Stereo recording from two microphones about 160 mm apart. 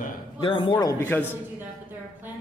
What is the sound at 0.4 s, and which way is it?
Speech, 30° left (ahead or behind).